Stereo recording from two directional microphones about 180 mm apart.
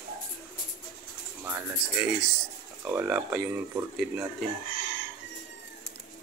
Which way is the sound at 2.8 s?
10° right (ahead or behind).